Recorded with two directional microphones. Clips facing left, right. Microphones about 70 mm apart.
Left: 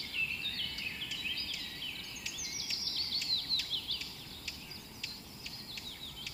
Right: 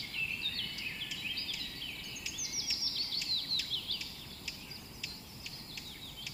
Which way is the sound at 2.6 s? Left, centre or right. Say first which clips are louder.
Right 1 dB; centre.